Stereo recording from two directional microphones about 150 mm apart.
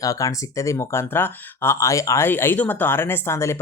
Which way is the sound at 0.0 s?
20° left (ahead or behind).